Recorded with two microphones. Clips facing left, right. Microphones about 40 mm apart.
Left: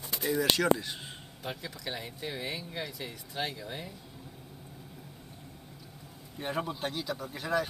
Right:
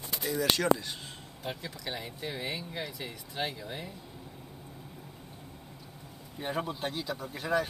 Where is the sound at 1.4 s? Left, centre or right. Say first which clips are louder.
Even; centre.